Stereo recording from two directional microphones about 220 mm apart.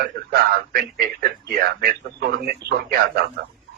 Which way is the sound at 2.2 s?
45° right (ahead or behind).